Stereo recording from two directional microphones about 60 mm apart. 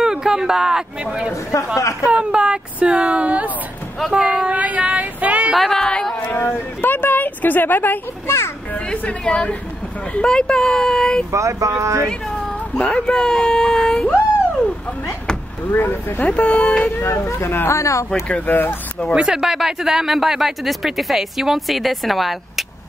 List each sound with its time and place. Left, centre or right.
0.0 s speech: centre
1.3 s speech: left
2.0 s speech: centre
4.1 s child singing: centre
5.7 s speech: centre
6.1 s speech: left
8.7 s speech: left
11.3 s speech: right
12.7 s speech: centre
15.7 s speech: left; by 16.9 s centre
17.4 s speech: left
17.7 s speech: left
18.3 s speech: left
19.2 s speech: centre